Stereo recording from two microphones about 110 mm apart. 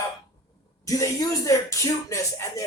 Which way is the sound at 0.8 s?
30° left (ahead or behind).